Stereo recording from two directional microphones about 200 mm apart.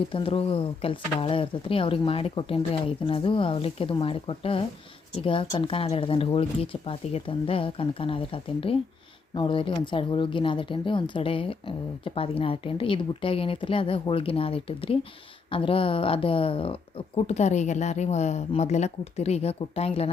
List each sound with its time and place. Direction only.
0.1 s speech: 25° left (ahead or behind)